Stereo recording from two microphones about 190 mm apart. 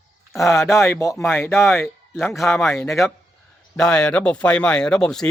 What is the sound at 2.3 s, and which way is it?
Speech, centre (ahead or behind).